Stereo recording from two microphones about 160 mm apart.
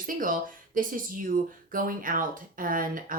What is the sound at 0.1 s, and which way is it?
Speech, 60° right (ahead or behind).